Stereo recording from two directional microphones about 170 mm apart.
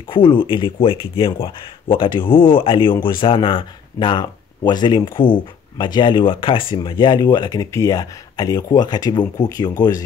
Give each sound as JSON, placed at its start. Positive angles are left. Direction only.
{"t": 0.1, "sound": "speech", "side_deg": 25}